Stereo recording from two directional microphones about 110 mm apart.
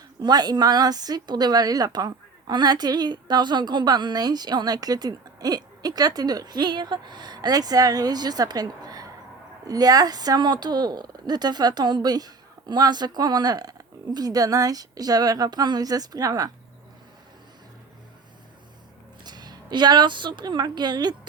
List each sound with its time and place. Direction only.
0.2 s a woman's voice: 40° right (ahead or behind)
19.2 s a woman's voice: 40° right (ahead or behind)